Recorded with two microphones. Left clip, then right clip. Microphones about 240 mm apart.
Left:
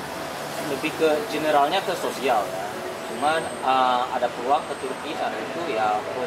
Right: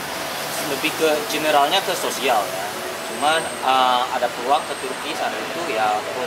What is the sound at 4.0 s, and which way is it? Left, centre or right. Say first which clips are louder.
Speech: right 3 dB; left.